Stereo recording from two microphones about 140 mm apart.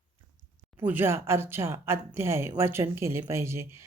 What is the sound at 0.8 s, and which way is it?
Speech, 15° right (ahead or behind).